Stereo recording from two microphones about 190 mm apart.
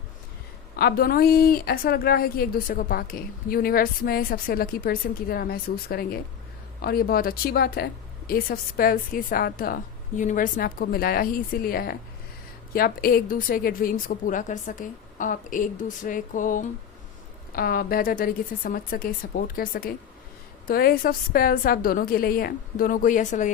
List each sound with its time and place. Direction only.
0.8 s speech: 55° left (ahead or behind)